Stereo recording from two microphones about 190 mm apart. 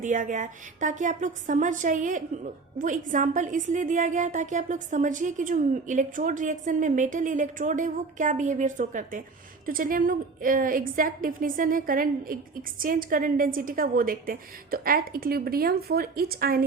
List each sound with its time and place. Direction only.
0.0 s a woman's voice: 45° right (ahead or behind)